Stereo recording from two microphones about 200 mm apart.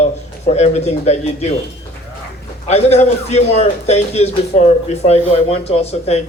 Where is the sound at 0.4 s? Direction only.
35° left (ahead or behind).